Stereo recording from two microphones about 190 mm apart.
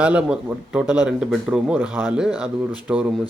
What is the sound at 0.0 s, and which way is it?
Speech, 5° right (ahead or behind).